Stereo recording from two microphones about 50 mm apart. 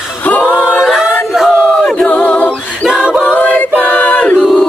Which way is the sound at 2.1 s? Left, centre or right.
Left.